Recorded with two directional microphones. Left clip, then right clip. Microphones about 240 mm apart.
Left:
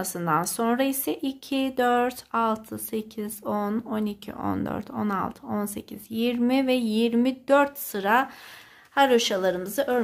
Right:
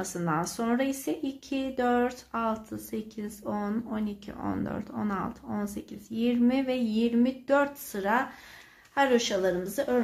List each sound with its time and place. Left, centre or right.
0.0 s speech: left